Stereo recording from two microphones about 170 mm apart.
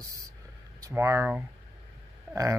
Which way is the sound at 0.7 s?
20° right (ahead or behind).